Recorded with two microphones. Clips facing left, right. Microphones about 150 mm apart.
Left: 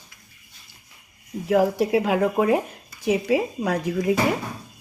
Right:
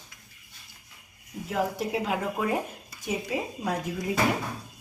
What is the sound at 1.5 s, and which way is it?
Speech, 70° left (ahead or behind).